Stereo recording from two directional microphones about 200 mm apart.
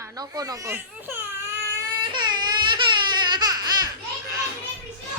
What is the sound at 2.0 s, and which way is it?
Baby cry, 20° right (ahead or behind).